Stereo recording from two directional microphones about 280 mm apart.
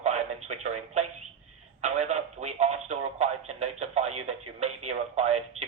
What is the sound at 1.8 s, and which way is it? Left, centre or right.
Radio, right.